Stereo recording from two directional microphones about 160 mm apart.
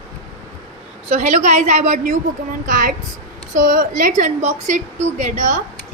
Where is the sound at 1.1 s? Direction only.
50° right (ahead or behind).